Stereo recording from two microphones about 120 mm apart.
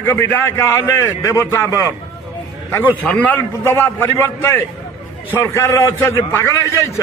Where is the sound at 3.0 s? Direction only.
10° left (ahead or behind).